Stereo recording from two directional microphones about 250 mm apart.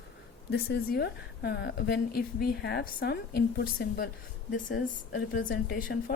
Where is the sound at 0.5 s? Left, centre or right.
Left.